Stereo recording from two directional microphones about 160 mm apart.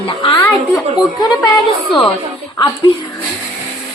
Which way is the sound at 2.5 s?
25° left (ahead or behind).